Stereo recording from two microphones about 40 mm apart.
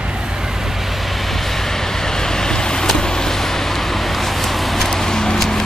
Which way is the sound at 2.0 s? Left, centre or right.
Centre.